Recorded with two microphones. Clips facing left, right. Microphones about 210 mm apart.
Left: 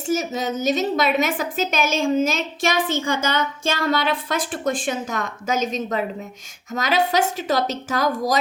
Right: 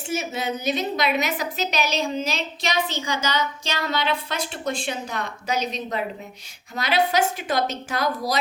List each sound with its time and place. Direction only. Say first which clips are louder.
0.1 s a woman's voice: left 4 dB; 40° left (ahead or behind)